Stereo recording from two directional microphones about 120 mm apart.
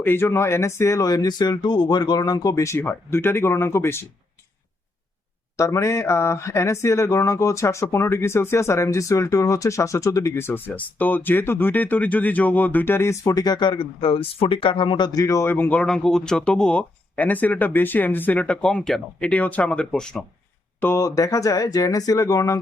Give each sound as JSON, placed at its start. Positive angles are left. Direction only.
{"t": 0.0, "sound": "speech", "side_deg": 20}
{"t": 5.5, "sound": "speech", "side_deg": 25}
{"t": 20.8, "sound": "speech", "side_deg": 25}